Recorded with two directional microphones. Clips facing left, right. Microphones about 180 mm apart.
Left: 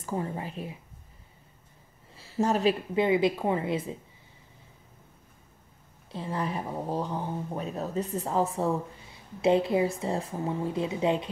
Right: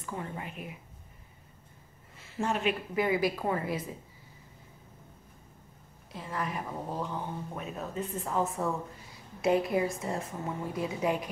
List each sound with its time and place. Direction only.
0.0 s speech: 30° left (ahead or behind)
2.1 s a woman's voice: 35° left (ahead or behind)
6.1 s a woman's voice: 30° left (ahead or behind)